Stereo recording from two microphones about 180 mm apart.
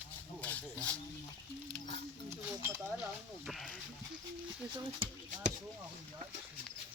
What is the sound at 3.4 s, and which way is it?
Speech, centre (ahead or behind).